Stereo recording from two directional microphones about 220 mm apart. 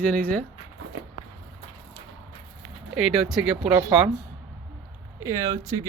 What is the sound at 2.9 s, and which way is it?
Speech, centre (ahead or behind).